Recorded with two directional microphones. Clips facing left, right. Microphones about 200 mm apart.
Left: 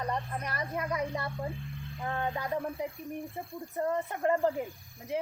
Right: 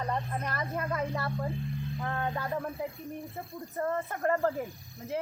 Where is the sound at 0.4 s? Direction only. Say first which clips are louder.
Right 1 dB; 15° left (ahead or behind).